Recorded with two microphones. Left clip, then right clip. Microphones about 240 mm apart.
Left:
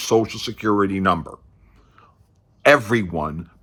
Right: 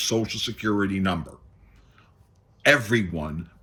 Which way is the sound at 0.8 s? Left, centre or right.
Left.